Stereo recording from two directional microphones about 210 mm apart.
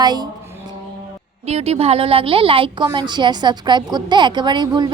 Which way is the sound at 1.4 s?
30° right (ahead or behind).